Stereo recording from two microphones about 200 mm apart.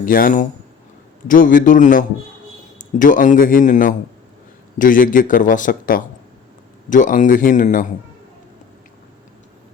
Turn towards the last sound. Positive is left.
turn(degrees=40)  # may be behind; listen again after turning